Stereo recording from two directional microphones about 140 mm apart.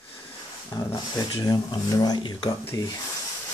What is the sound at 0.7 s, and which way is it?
Speech, 30° left (ahead or behind).